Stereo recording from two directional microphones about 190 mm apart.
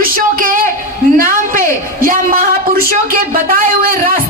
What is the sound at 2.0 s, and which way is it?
Speech, 45° right (ahead or behind).